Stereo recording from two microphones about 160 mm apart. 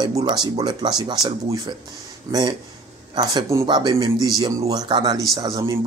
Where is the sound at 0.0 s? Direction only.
25° right (ahead or behind).